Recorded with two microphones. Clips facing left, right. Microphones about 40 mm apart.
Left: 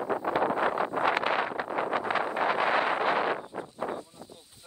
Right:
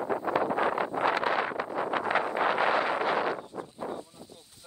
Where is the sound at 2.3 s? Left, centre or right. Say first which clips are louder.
Even; right.